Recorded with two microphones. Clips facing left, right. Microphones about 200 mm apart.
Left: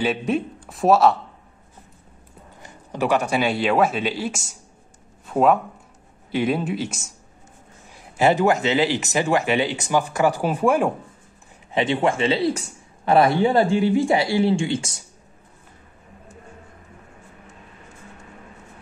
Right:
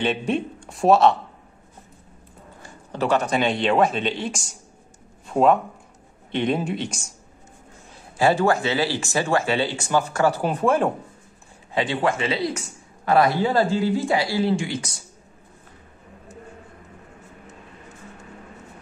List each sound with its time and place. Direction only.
0.0 s a man's voice: 5° left (ahead or behind)
2.6 s speech: 15° left (ahead or behind)
8.2 s speech: 20° left (ahead or behind)
11.7 s speech: 20° left (ahead or behind)